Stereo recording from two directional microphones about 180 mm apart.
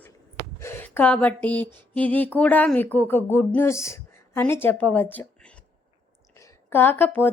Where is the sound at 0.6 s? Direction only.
10° left (ahead or behind).